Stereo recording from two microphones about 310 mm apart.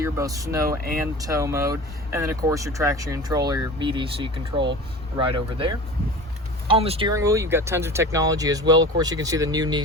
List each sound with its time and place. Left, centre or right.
0.0 s speech: centre